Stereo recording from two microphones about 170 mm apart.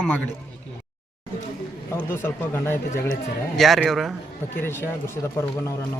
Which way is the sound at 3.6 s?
Centre (ahead or behind).